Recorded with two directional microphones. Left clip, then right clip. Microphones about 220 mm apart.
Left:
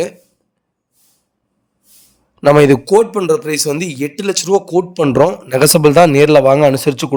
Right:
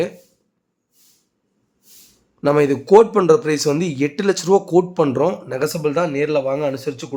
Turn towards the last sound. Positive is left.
turn(degrees=45)  # may be behind; listen again after turning